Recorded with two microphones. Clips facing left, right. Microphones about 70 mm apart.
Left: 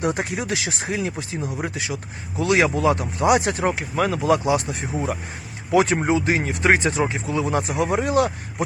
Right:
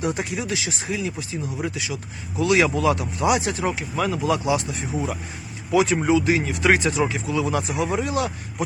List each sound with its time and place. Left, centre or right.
0.0 s speech: left